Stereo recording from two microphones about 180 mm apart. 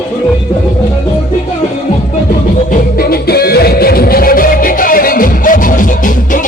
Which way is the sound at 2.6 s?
60° left (ahead or behind).